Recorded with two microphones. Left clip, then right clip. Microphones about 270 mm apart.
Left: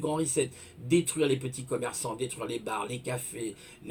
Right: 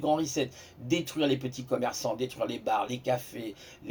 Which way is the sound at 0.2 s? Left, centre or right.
Centre.